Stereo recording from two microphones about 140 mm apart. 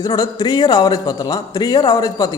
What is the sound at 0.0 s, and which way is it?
A man's voice, 30° left (ahead or behind).